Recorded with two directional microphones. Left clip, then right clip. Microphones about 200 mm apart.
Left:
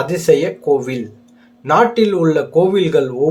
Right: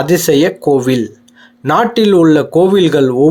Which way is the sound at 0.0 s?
35° right (ahead or behind).